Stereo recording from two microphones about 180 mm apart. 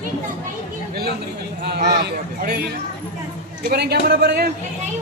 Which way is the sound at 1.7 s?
65° right (ahead or behind).